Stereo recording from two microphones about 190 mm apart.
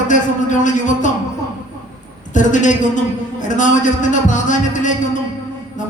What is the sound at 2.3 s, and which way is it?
A woman's voice, 40° left (ahead or behind).